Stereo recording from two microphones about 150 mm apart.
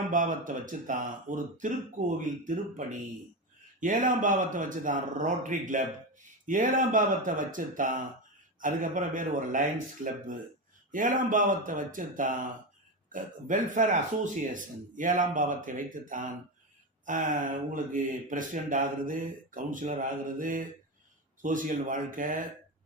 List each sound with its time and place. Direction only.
0.1 s speech: 60° right (ahead or behind)